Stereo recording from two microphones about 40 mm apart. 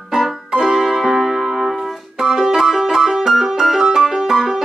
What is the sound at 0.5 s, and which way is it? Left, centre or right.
Music, centre.